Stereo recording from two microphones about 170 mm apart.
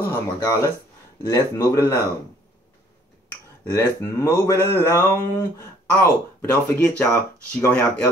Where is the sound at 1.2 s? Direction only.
20° left (ahead or behind).